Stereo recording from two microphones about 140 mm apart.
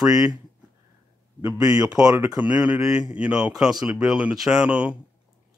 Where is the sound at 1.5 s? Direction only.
25° right (ahead or behind).